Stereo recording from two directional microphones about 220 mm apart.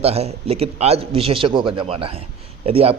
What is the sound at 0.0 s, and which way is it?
A man's voice, 30° right (ahead or behind).